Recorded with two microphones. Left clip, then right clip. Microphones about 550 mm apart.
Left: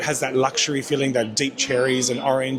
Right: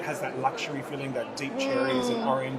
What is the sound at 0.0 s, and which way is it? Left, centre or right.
Speech, left.